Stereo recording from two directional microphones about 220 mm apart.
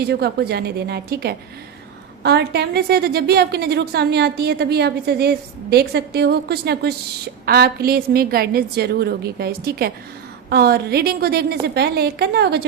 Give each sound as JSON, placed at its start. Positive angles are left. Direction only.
{"t": 0.1, "sound": "a woman's voice", "side_deg": -50}